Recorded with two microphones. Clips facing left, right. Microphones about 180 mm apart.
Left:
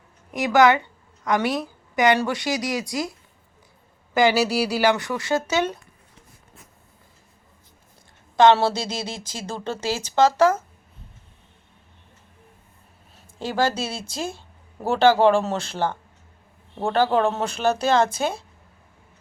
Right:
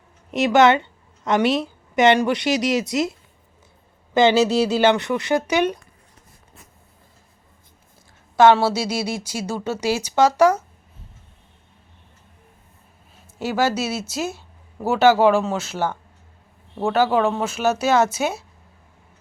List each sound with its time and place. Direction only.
0.3 s a woman's voice: 25° right (ahead or behind)
8.4 s speech: 5° right (ahead or behind)
13.4 s speech: 10° right (ahead or behind)